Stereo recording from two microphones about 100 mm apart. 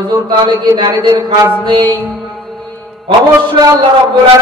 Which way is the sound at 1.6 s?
55° right (ahead or behind).